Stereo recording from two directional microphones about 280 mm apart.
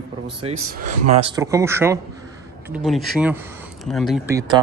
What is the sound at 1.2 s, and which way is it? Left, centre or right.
Speech, centre.